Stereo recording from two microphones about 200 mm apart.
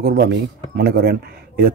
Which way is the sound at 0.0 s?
55° right (ahead or behind).